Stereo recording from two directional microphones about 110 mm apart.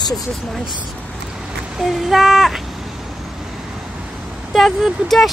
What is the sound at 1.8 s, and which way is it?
Speech, centre (ahead or behind).